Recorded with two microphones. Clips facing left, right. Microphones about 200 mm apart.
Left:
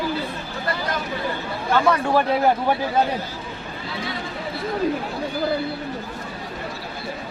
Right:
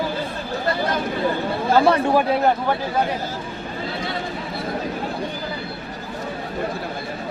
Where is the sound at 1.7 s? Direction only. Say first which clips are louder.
Right 3 dB; 30° right (ahead or behind).